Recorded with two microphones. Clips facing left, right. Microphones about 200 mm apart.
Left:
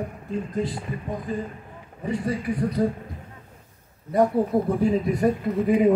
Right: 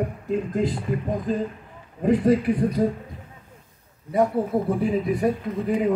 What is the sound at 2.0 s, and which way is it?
Speech, 90° right.